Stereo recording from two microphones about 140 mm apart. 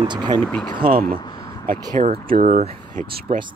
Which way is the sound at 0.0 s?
30° right (ahead or behind).